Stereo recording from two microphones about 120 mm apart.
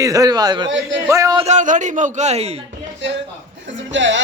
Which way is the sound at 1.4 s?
80° right.